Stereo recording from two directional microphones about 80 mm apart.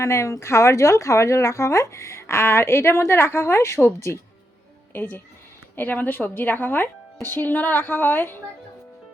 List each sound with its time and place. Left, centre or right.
0.0 s a woman's voice: left